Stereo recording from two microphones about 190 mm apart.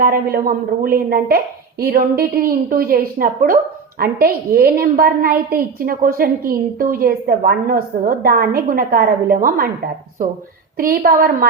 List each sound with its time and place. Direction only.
0.0 s a woman's voice: 50° right (ahead or behind)